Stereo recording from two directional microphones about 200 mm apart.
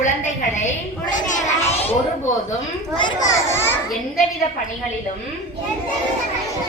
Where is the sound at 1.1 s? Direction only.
35° left (ahead or behind).